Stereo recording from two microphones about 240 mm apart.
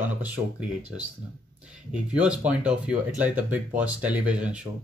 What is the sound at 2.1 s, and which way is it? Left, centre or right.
Speech, centre.